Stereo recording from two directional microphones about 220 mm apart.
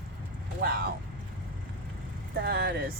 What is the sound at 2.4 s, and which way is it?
Speech, 45° right (ahead or behind).